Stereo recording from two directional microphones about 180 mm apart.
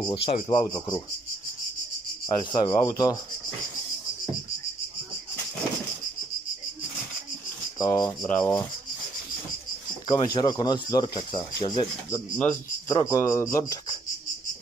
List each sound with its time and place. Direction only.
0.0 s speech: 30° left (ahead or behind)
2.2 s speech: 25° left (ahead or behind)
7.8 s speech: 20° left (ahead or behind)
10.0 s speech: 25° left (ahead or behind)
12.4 s speech: 15° left (ahead or behind)